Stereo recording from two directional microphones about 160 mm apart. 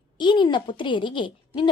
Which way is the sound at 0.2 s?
30° left (ahead or behind).